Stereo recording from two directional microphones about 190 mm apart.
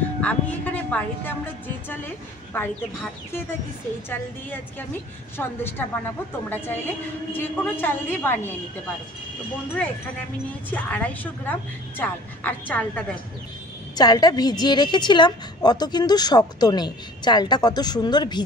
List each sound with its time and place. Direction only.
0.2 s a woman's voice: 5° left (ahead or behind)
10.7 s a woman's voice: 10° left (ahead or behind)
12.0 s a woman's voice: 10° left (ahead or behind)
13.9 s a woman's voice: 20° left (ahead or behind)